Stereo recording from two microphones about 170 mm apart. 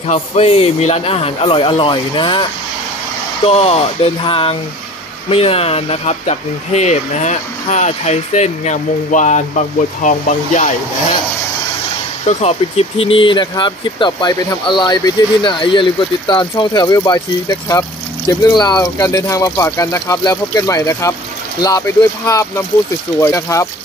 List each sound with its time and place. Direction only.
0.1 s speech: 35° left (ahead or behind)
3.4 s speech: 35° left (ahead or behind)
12.3 s speech: 40° left (ahead or behind); by 23.7 s 15° left (ahead or behind)